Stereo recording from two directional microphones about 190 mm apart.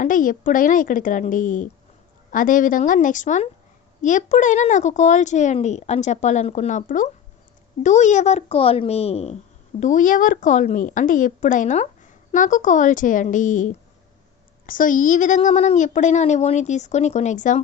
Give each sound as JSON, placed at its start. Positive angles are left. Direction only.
{"t": 0.0, "sound": "a woman's voice", "side_deg": 45}